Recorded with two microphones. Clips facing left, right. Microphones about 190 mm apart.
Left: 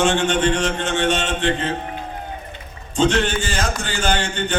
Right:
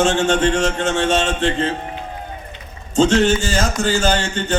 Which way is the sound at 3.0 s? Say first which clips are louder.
Right 4 dB; 40° right (ahead or behind).